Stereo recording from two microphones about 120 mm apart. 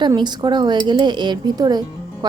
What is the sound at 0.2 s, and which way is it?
A woman's voice, 40° right (ahead or behind).